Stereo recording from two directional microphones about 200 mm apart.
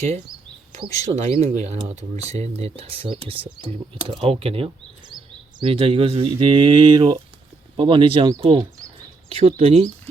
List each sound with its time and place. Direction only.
1.0 s speech: 30° right (ahead or behind)